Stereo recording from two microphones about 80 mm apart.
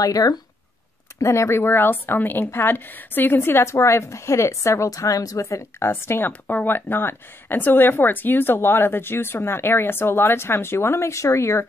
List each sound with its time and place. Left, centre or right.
0.0 s speech: left
1.2 s a woman's voice: left